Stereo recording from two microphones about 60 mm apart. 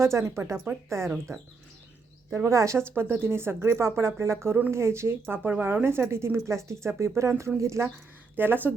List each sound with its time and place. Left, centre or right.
0.0 s speech: right
2.3 s speech: right
2.9 s speech: right
5.4 s speech: right
8.4 s speech: right